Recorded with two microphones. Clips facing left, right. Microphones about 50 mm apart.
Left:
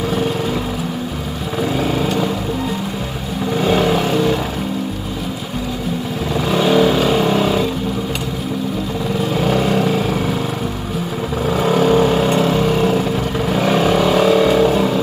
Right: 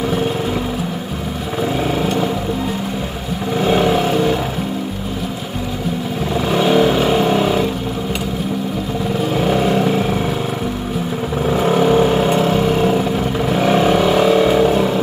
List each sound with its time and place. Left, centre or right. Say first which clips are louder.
1.8 s vehicle: left 1 dB; centre
3.5 s vehicle: right 1 dB; centre
6.5 s vehicle: even; centre
9.3 s vehicle: right 1 dB; centre
11.6 s vehicle: even; right
12.2 s vehicle: even; centre